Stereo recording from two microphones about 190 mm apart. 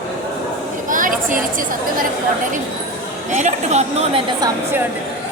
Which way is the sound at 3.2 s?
35° right (ahead or behind).